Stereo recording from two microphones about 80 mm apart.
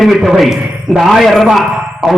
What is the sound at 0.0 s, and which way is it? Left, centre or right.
A man's voice, centre.